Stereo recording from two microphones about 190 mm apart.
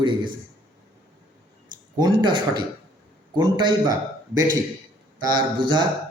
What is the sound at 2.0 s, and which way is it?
Speech, 25° right (ahead or behind).